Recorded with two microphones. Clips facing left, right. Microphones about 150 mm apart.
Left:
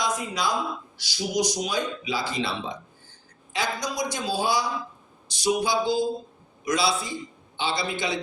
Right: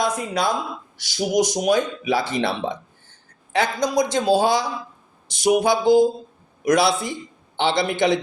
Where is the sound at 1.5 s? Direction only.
60° right (ahead or behind).